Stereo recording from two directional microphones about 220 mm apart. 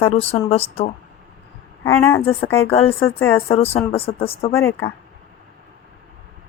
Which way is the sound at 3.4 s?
25° left (ahead or behind).